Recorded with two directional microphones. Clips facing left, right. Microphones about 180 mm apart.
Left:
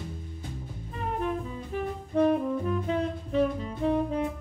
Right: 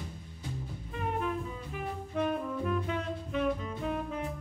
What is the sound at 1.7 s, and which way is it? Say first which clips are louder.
Saxophone: left 6 dB; 35° left (ahead or behind).